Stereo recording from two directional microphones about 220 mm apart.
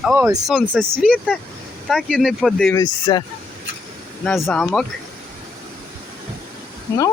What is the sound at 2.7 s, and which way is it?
Speech, 20° left (ahead or behind).